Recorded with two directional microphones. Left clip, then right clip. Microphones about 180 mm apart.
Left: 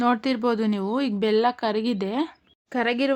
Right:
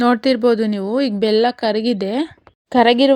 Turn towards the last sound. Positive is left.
turn(degrees=-30)  # may be behind; listen again after turning